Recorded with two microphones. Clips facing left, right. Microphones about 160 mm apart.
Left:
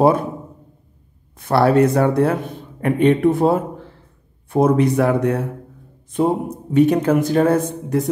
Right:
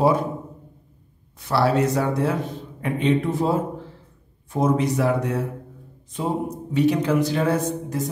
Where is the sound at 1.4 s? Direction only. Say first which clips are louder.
Left 6 dB; 55° left (ahead or behind).